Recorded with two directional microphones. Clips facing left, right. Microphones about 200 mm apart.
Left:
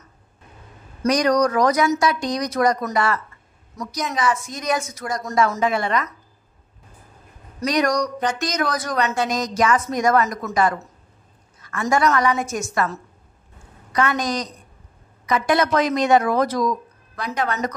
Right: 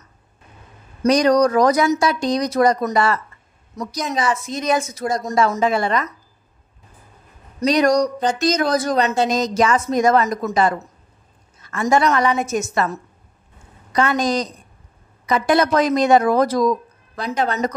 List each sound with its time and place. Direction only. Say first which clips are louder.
1.0 s speech: right 3 dB; 30° right (ahead or behind)
7.6 s speech: right 5 dB; 30° right (ahead or behind)